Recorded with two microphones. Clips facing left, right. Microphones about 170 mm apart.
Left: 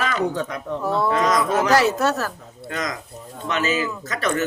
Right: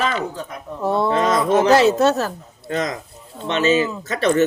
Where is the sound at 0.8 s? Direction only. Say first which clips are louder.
Right 3 dB; 25° right (ahead or behind).